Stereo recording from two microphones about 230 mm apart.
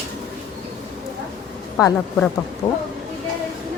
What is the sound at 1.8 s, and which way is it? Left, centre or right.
Speech, centre.